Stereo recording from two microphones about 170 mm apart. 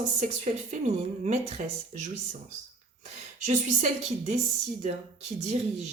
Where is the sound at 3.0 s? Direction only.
45° right (ahead or behind).